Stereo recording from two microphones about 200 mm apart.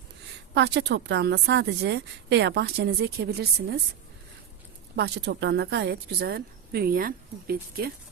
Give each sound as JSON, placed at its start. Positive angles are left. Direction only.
{"t": 0.5, "sound": "a woman's voice", "side_deg": -60}
{"t": 4.9, "sound": "speech", "side_deg": -55}